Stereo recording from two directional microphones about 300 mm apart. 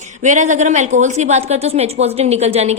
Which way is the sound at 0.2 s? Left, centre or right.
Right.